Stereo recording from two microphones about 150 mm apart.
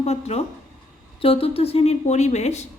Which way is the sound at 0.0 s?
45° left (ahead or behind).